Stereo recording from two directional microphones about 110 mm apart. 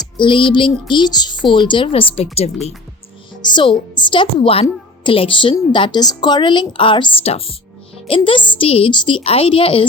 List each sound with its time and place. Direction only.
0.2 s a woman's voice: 50° left (ahead or behind)
3.5 s a woman's voice: 45° left (ahead or behind)
8.9 s speech: 50° left (ahead or behind)